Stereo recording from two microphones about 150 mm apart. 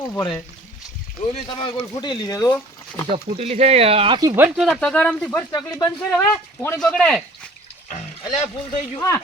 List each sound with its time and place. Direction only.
0.0 s speech: 25° left (ahead or behind)
1.2 s speech: 35° left (ahead or behind); by 2.6 s 20° left (ahead or behind)
3.1 s speech: 45° right (ahead or behind)
4.4 s speech: centre (ahead or behind)
5.5 s speech: 20° left (ahead or behind)
6.0 s speech: 10° left (ahead or behind)
9.0 s speech: 15° left (ahead or behind)